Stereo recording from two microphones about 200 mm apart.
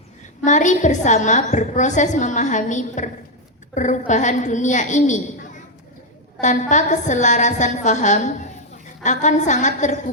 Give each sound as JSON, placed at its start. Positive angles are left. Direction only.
{"t": 0.4, "sound": "a woman's voice", "side_deg": 35}